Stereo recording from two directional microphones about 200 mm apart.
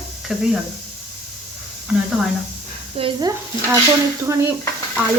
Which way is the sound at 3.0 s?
25° right (ahead or behind).